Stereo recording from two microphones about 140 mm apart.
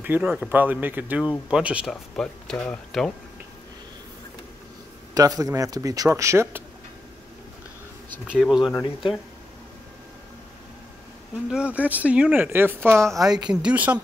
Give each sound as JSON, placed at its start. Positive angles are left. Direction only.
{"t": 0.0, "sound": "speech", "side_deg": -10}
{"t": 1.9, "sound": "speech", "side_deg": 5}
{"t": 5.1, "sound": "speech", "side_deg": -25}
{"t": 8.3, "sound": "speech", "side_deg": -5}
{"t": 11.5, "sound": "speech", "side_deg": -10}
{"t": 13.0, "sound": "speech", "side_deg": 0}